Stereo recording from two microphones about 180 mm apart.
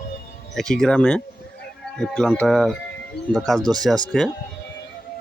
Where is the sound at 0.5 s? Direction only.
5° left (ahead or behind).